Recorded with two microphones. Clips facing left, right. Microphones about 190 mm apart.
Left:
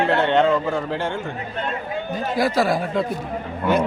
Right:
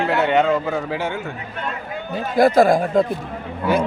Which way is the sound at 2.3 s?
50° right (ahead or behind).